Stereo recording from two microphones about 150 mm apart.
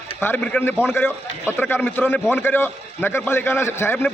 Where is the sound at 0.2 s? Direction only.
10° left (ahead or behind).